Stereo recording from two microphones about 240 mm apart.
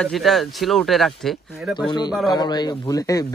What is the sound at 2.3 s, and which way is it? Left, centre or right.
Speech, centre.